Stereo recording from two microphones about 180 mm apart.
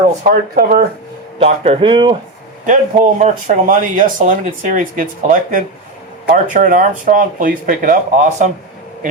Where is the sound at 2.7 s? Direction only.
45° right (ahead or behind).